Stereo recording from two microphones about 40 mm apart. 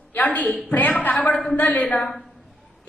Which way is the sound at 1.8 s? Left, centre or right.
Left.